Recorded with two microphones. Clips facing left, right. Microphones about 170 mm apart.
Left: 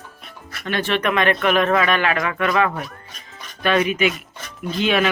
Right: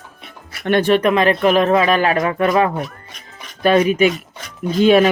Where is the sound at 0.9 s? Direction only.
35° right (ahead or behind).